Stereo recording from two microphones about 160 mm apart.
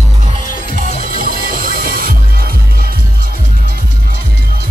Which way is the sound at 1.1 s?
65° right (ahead or behind).